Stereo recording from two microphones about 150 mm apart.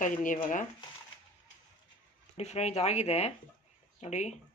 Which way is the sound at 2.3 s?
50° left (ahead or behind).